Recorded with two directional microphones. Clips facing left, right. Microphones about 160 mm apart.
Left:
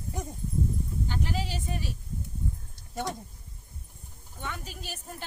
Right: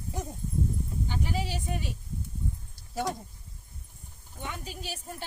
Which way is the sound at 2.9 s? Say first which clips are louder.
Right 2 dB; centre (ahead or behind).